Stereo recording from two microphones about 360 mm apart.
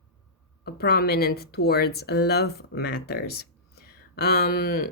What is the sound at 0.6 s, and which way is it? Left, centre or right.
Speech, left.